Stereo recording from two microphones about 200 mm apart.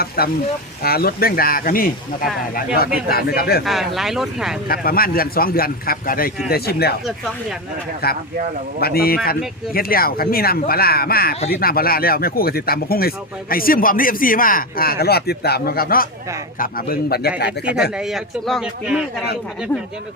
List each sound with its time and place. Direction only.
0.2 s speech: 50° left (ahead or behind)
3.1 s speech: 50° left (ahead or behind)
3.6 s a man's voice: centre (ahead or behind)
4.7 s speech: 45° left (ahead or behind)
8.0 s speech: 50° left (ahead or behind)
17.9 s a man's voice: centre (ahead or behind)